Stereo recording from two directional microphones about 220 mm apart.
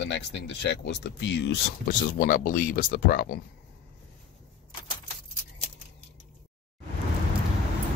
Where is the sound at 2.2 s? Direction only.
40° left (ahead or behind).